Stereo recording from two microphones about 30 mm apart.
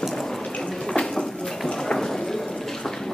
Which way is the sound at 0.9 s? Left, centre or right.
Left.